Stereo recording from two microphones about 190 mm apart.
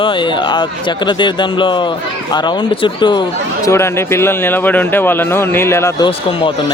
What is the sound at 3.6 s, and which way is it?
A man's voice, 15° left (ahead or behind).